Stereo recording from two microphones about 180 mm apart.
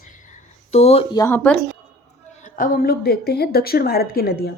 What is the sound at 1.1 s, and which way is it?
Speech, 15° left (ahead or behind).